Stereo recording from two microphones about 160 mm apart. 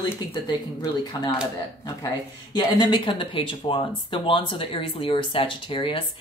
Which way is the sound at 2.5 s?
25° left (ahead or behind).